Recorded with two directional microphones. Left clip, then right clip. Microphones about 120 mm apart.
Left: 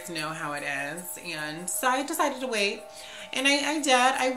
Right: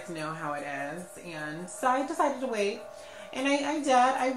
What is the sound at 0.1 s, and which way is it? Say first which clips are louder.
A woman's voice: left 2 dB; 25° left (ahead or behind).